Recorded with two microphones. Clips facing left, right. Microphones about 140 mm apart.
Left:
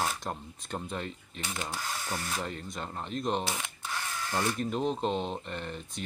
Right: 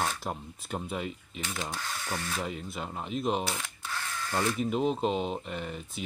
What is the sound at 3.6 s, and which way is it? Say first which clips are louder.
Drill: left 1 dB; 15° left (ahead or behind).